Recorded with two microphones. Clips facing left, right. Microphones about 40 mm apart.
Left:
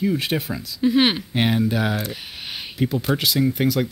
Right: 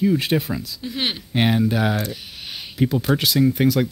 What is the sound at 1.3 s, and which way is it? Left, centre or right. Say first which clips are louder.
Speech: right 1 dB; centre.